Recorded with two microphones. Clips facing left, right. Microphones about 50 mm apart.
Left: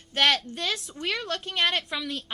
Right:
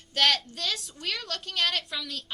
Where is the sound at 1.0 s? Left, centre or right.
Left.